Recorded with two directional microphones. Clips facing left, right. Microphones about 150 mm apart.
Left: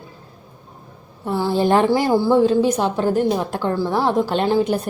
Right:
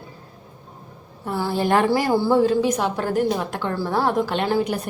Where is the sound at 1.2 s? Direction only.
20° left (ahead or behind).